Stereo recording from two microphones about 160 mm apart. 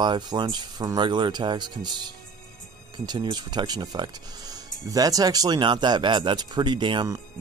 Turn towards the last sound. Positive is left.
turn(degrees=-30)  # may be behind; listen again after turning